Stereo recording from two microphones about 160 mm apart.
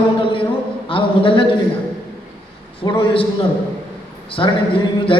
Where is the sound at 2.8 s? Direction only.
35° left (ahead or behind).